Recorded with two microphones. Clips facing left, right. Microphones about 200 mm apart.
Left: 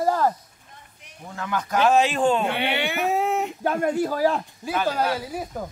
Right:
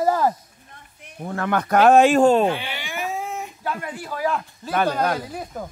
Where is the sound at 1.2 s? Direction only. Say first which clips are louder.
Right 6 dB; 60° right (ahead or behind); by 2.4 s 40° right (ahead or behind).